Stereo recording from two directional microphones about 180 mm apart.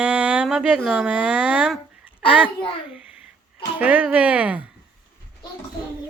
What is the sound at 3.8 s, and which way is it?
Speech, 10° right (ahead or behind).